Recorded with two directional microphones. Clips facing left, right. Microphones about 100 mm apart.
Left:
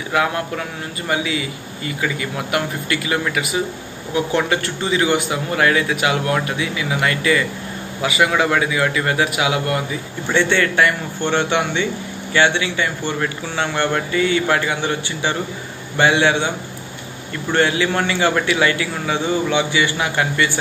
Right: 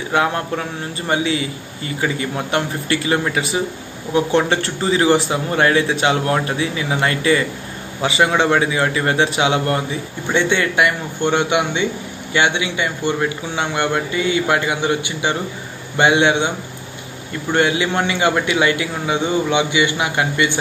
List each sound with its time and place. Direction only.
0.1 s a man's voice: 30° right (ahead or behind)
10.2 s a man's voice: 15° right (ahead or behind)